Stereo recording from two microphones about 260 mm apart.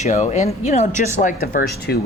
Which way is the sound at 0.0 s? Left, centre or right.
Left.